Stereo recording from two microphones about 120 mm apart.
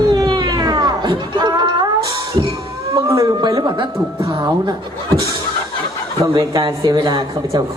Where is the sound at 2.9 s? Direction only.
30° right (ahead or behind).